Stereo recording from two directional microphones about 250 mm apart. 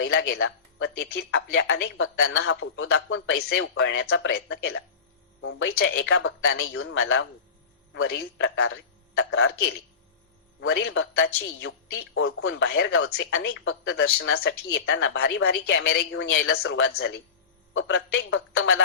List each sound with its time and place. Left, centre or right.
0.0 s speech: left
1.0 s speech: left
8.6 s speech: left